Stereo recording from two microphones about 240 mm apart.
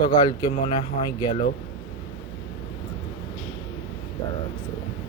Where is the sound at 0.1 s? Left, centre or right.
Centre.